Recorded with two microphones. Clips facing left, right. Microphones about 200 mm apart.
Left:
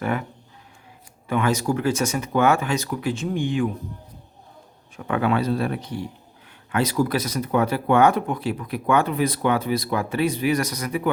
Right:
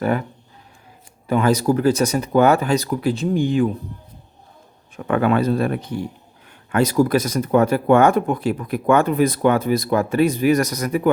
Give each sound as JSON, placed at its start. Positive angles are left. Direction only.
{"t": 0.0, "sound": "speech", "side_deg": -35}
{"t": 1.3, "sound": "speech", "side_deg": -35}
{"t": 4.9, "sound": "speech", "side_deg": -50}